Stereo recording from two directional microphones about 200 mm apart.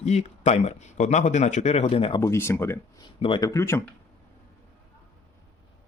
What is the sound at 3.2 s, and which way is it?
Speech, 20° left (ahead or behind).